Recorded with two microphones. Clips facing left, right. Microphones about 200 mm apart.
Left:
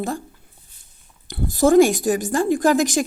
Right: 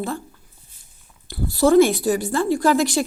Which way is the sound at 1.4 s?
45° left (ahead or behind).